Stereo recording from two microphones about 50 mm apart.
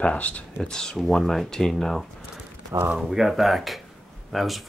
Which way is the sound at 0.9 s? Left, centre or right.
Centre.